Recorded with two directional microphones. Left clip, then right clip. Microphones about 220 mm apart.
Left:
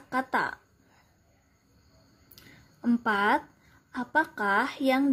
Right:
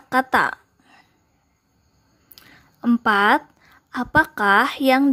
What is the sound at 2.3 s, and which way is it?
Speech, 25° right (ahead or behind).